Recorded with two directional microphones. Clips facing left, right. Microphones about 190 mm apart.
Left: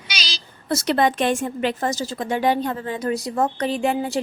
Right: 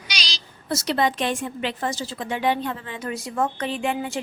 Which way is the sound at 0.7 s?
55° left (ahead or behind).